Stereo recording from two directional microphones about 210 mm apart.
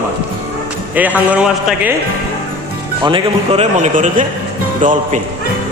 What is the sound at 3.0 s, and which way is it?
A man's voice, 25° right (ahead or behind).